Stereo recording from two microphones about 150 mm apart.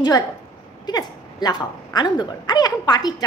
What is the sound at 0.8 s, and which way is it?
A woman's voice, 30° left (ahead or behind).